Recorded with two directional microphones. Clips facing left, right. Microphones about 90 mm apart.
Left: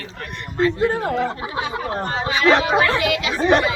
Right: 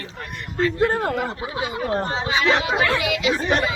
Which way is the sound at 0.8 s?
60° right (ahead or behind).